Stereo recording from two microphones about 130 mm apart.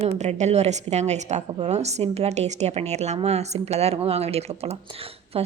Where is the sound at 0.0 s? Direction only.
60° right (ahead or behind).